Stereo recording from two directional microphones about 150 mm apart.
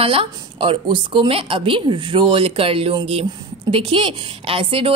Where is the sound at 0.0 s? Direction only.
35° right (ahead or behind).